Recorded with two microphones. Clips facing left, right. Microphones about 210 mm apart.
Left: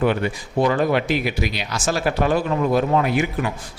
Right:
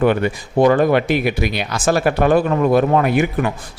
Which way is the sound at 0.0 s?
55° right (ahead or behind).